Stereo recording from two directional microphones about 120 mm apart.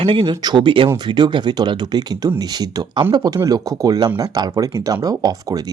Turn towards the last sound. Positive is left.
turn(degrees=-30)  # may be behind; listen again after turning